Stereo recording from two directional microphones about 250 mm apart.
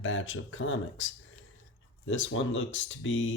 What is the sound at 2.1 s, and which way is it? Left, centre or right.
Speech, left.